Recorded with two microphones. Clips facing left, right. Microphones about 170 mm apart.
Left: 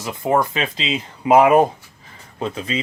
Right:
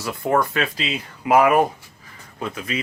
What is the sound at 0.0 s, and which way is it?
Speech, 20° left (ahead or behind).